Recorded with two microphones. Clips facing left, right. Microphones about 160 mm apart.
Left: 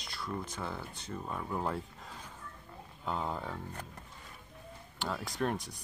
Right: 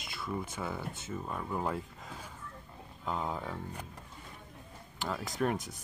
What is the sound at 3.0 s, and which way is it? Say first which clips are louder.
Speech: even; centre (ahead or behind).